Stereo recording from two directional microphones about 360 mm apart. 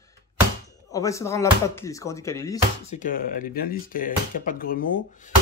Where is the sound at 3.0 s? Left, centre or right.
Left.